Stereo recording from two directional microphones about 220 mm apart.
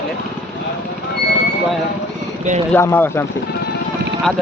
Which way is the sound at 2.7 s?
10° left (ahead or behind).